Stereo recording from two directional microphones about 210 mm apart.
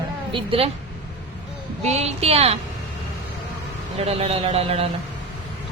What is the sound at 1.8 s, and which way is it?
Speech, 30° right (ahead or behind).